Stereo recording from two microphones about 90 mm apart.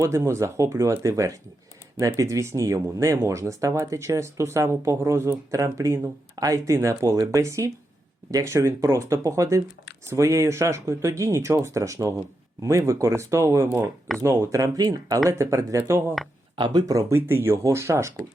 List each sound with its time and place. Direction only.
0.0 s speech: 30° right (ahead or behind)
15.3 s speech: 35° right (ahead or behind)
16.6 s speech: 60° right (ahead or behind)
16.9 s speech: 40° right (ahead or behind)
17.2 s speech: 25° right (ahead or behind)